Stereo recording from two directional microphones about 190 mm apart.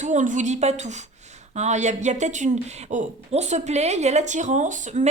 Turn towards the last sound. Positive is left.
turn(degrees=-40)  # may be behind; listen again after turning